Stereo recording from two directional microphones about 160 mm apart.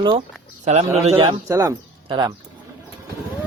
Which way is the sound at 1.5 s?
20° right (ahead or behind).